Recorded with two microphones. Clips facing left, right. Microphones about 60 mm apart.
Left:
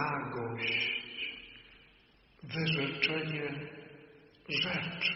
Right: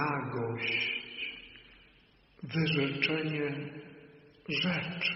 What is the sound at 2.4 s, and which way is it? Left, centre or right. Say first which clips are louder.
Speech: right 4 dB; right.